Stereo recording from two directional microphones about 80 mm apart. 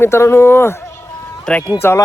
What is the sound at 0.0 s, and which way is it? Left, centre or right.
Speech, left.